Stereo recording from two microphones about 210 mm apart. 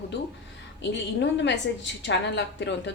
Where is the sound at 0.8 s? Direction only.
55° left (ahead or behind).